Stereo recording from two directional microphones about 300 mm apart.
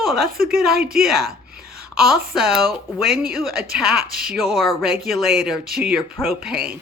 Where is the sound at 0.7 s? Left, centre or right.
Right.